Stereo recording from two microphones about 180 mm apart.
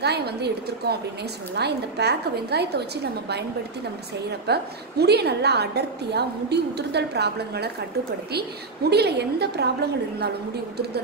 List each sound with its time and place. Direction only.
0.0 s a woman's voice: 65° right (ahead or behind)
4.3 s a woman's voice: 65° right (ahead or behind)
8.9 s a woman's voice: 65° right (ahead or behind)